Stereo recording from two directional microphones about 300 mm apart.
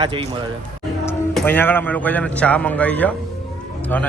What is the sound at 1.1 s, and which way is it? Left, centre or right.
A man's voice, centre.